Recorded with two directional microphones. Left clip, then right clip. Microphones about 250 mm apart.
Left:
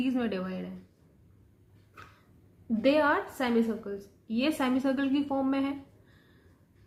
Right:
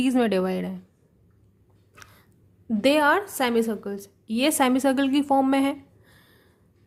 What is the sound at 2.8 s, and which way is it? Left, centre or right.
Speech, right.